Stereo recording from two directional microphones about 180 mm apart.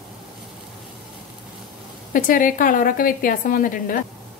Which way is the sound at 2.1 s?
50° left (ahead or behind).